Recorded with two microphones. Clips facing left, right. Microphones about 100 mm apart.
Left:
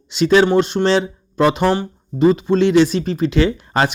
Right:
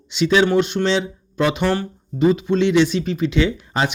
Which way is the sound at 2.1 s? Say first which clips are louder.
Left 3 dB; 35° left (ahead or behind).